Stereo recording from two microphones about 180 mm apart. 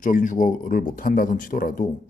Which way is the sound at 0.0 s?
45° left (ahead or behind).